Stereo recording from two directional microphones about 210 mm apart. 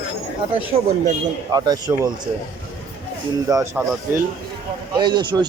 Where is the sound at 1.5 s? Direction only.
20° right (ahead or behind).